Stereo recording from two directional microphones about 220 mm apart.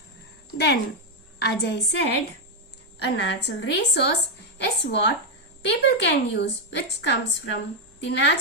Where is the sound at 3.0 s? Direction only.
50° left (ahead or behind).